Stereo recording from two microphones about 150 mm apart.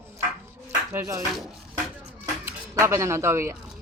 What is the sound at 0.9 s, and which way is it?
Speech, 20° right (ahead or behind).